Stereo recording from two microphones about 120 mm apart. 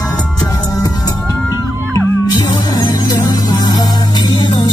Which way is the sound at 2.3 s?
35° left (ahead or behind).